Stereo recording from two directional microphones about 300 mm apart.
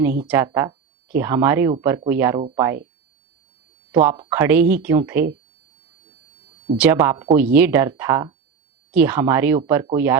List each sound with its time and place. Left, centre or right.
0.3 s speech: centre
3.9 s speech: centre
6.7 s speech: centre